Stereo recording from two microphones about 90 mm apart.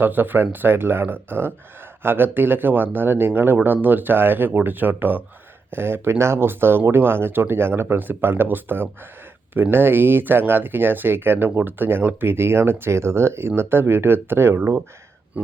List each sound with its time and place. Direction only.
0.0 s speech: 20° right (ahead or behind)